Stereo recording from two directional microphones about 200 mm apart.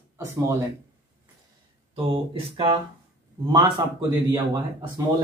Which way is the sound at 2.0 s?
25° right (ahead or behind).